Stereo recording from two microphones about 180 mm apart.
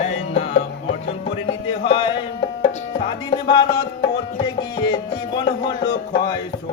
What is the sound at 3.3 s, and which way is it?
Music, 25° left (ahead or behind).